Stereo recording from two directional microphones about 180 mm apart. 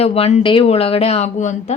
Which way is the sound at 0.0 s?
35° left (ahead or behind).